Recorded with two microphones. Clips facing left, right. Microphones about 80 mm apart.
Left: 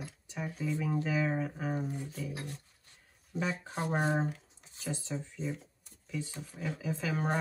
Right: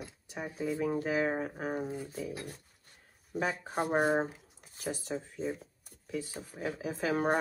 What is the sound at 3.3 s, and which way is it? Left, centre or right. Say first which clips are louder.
Speech: right 2 dB; right.